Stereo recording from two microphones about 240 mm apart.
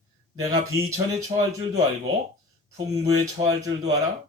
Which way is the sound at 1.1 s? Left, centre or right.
Centre.